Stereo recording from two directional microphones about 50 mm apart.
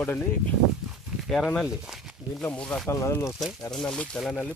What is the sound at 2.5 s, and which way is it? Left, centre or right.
Speech, centre.